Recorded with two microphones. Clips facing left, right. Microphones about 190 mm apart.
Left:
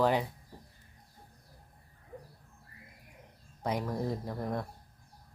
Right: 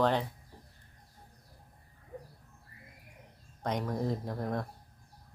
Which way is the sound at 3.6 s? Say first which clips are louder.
Even; 5° left (ahead or behind).